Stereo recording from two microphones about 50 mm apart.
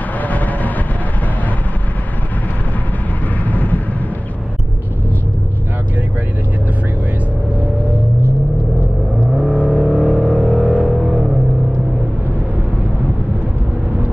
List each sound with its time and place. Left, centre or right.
0.3 s vehicle: left
3.4 s vehicle: left
9.3 s vehicle: centre
11.0 s vehicle: centre